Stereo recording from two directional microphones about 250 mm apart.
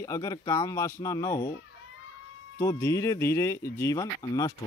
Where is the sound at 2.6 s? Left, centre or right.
Centre.